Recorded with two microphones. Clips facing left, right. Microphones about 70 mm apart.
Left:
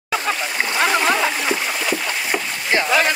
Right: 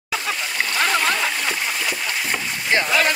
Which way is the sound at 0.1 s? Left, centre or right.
Left.